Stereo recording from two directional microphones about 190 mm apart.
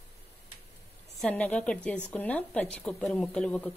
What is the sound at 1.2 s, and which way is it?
A woman's voice, 5° left (ahead or behind).